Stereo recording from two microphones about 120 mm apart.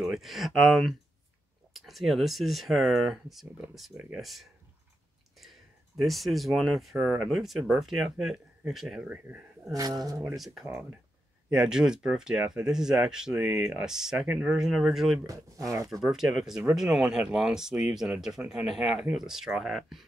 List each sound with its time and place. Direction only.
0.0 s speech: centre (ahead or behind)
9.0 s speech: 15° right (ahead or behind)
9.7 s speech: 30° right (ahead or behind)
10.3 s speech: 5° right (ahead or behind)
15.2 s speech: 25° right (ahead or behind)
16.0 s speech: 5° right (ahead or behind)